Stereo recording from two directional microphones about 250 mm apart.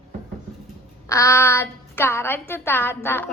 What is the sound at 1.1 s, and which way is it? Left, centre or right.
A woman's voice, centre.